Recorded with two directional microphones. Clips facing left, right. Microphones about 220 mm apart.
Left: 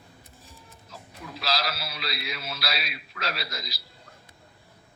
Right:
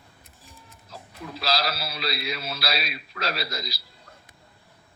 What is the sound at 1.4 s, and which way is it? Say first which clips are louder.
A man's voice: right 3 dB; 35° right (ahead or behind).